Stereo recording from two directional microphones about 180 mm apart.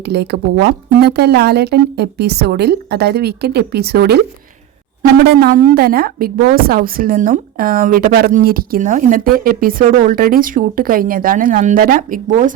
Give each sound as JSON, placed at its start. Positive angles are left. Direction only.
{"t": 0.0, "sound": "speech", "side_deg": -65}
{"t": 5.2, "sound": "a woman's voice", "side_deg": -60}